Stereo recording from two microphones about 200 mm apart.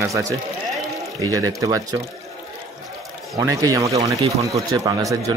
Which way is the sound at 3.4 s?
20° right (ahead or behind).